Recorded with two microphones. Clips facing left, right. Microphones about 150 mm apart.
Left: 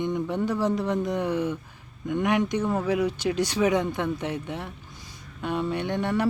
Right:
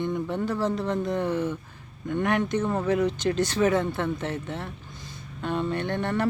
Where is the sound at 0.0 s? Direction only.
15° left (ahead or behind).